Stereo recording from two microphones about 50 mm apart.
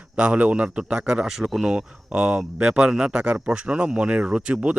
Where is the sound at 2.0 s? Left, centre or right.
Right.